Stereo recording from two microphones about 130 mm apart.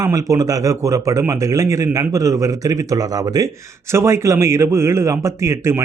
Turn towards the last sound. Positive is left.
turn(degrees=-20)  # may be behind; listen again after turning